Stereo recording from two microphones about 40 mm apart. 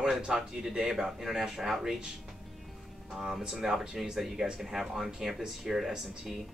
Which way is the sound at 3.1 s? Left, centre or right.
Centre.